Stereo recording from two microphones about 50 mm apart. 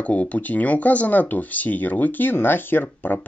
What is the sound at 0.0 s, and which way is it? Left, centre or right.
Speech, left.